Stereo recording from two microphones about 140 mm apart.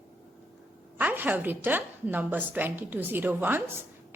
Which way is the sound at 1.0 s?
10° right (ahead or behind).